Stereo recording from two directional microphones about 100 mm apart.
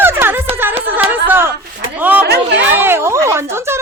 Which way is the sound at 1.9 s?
15° right (ahead or behind).